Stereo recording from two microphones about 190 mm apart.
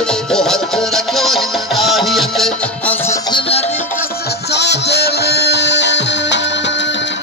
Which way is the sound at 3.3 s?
30° left (ahead or behind).